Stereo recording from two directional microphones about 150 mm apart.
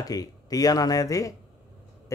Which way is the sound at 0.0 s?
25° left (ahead or behind).